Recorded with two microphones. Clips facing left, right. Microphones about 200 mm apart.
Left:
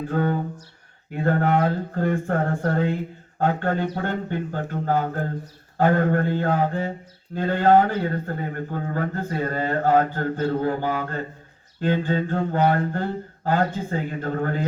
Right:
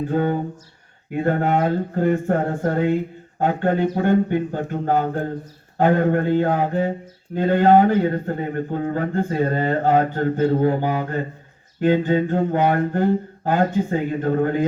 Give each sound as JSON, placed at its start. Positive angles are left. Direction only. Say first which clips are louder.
{"t": 0.1, "sound": "a man's voice", "louder": "right 2 dB", "side_deg": -20}
{"t": 1.1, "sound": "mantra", "louder": "right 2 dB", "side_deg": -20}
{"t": 5.7, "sound": "a man's voice", "louder": "right 2 dB", "side_deg": -20}
{"t": 11.8, "sound": "mantra", "louder": "right 5 dB", "side_deg": -15}